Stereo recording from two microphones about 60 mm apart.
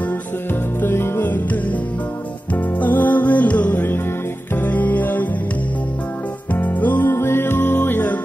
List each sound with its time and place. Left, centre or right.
0.7 s music: left
6.5 s music: left
7.1 s music: left